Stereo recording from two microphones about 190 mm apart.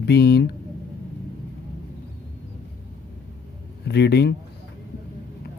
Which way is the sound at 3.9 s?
60° left (ahead or behind).